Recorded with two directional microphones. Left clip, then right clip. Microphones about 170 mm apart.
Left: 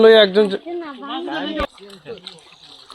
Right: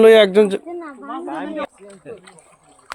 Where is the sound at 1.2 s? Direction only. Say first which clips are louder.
Left 2 dB; 40° left (ahead or behind).